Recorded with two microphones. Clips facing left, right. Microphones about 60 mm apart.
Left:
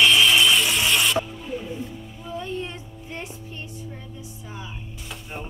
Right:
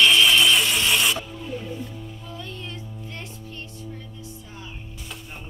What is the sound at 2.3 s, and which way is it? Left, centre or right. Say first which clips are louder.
Music: left 9 dB; left.